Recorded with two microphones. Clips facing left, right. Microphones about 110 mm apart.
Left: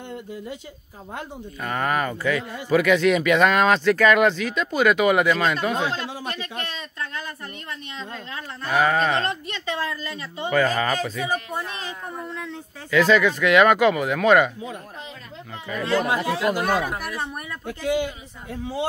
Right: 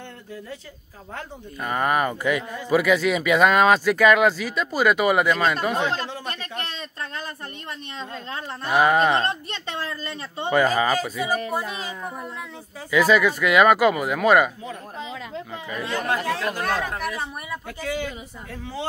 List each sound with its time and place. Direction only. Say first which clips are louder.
1.6 s a child's voice: right 2 dB; 10° right (ahead or behind); by 6.3 s 10° left (ahead or behind)
8.0 s a woman's voice: right 4 dB; 30° right (ahead or behind)
8.6 s a child's voice: right 2 dB; 15° right (ahead or behind)
10.1 s speech: right 1 dB; 35° right (ahead or behind)
10.5 s a child's voice: right 2 dB; 10° right (ahead or behind)
12.9 s speech: even; 10° right (ahead or behind)
16.1 s speech: left 2 dB; 15° left (ahead or behind)
17.6 s speech: left 6 dB; 20° left (ahead or behind)